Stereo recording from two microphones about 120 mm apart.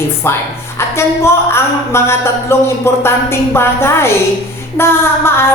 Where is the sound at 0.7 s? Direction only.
20° left (ahead or behind).